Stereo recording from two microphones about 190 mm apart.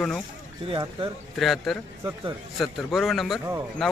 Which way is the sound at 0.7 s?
25° right (ahead or behind).